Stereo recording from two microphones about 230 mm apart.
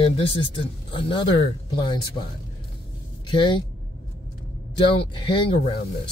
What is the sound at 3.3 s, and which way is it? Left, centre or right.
Speech, centre.